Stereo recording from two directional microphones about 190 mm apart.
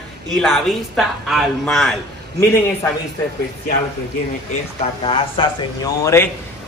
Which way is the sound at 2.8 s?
15° left (ahead or behind).